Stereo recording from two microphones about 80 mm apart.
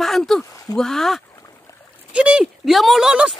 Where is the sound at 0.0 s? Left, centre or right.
Centre.